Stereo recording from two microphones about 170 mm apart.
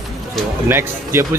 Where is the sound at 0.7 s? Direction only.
15° right (ahead or behind).